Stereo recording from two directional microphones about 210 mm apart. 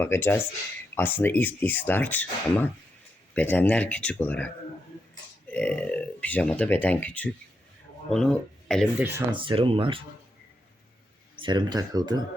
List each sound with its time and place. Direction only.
0.0 s speech: 10° left (ahead or behind)
9.1 s speech: 25° right (ahead or behind)
11.3 s speech: 20° right (ahead or behind)